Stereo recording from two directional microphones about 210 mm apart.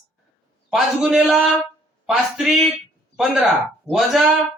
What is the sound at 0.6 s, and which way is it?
A man's voice, 5° right (ahead or behind).